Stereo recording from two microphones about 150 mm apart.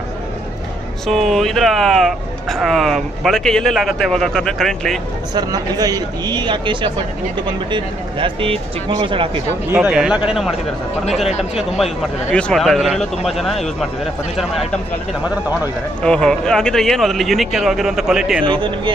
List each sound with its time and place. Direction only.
1.0 s speech: centre (ahead or behind)
5.3 s speech: 25° right (ahead or behind)
9.7 s speech: 10° right (ahead or behind)
11.5 s speech: 5° right (ahead or behind)
12.3 s speech: 5° left (ahead or behind)
15.2 s speech: 10° right (ahead or behind)
16.0 s speech: 5° left (ahead or behind)
18.4 s speech: 30° right (ahead or behind)